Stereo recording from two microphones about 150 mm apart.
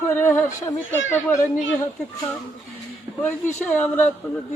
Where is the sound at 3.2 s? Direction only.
15° left (ahead or behind).